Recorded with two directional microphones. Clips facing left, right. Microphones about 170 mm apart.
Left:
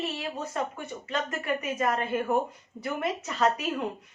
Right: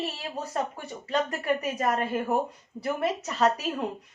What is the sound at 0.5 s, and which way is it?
A woman's voice, 40° right (ahead or behind).